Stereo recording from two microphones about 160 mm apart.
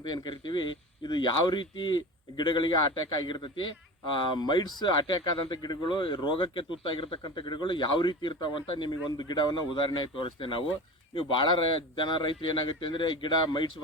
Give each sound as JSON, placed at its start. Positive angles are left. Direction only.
{"t": 0.0, "sound": "speech", "side_deg": 25}